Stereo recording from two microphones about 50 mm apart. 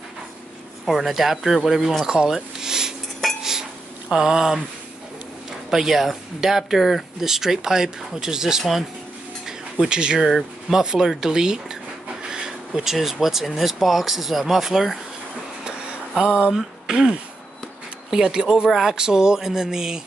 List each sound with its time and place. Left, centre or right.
0.8 s speech: centre
2.1 s a sound: centre
4.1 s speech: centre
5.7 s speech: centre
11.1 s a sound: centre
12.9 s speech: centre
16.2 s speech: centre